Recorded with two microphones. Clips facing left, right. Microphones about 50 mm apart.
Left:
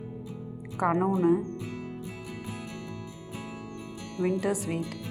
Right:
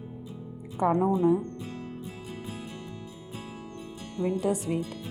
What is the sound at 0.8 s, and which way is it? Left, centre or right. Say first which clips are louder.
Speech: right 1 dB; left.